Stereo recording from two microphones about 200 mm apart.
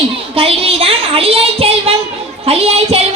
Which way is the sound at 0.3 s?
30° right (ahead or behind).